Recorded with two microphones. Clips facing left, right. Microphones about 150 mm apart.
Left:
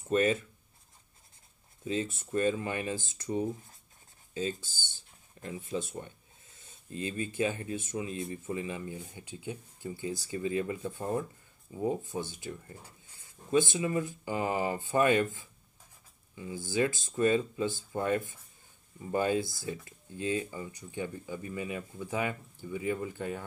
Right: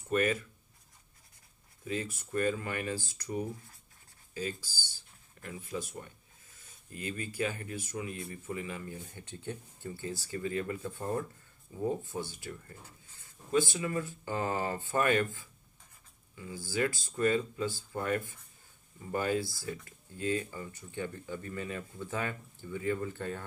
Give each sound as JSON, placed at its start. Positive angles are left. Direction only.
{"t": 0.1, "sound": "speech", "side_deg": 25}
{"t": 1.9, "sound": "speech", "side_deg": 25}